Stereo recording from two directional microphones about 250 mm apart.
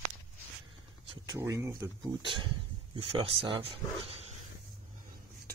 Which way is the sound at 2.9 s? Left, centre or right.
Right.